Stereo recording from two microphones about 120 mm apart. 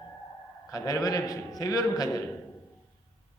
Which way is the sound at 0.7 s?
30° left (ahead or behind).